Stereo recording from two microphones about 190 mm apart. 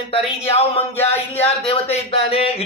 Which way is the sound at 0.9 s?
10° left (ahead or behind).